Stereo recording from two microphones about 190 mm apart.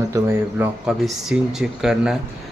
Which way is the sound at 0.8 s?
Centre (ahead or behind).